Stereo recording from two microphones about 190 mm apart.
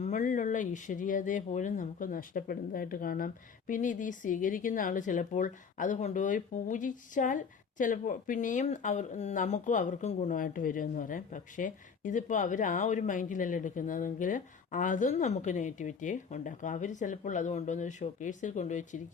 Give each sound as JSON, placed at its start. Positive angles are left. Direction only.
{"t": 0.0, "sound": "speech", "side_deg": 40}